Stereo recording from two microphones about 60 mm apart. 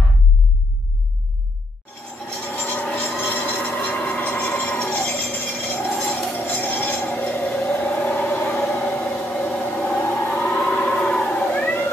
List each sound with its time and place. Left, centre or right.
2.5 s vehicle: left
3.2 s train: left
5.2 s a sound: left
8.2 s vehicle: left
8.5 s a sound: centre
10.0 s siren: left
10.6 s cat: left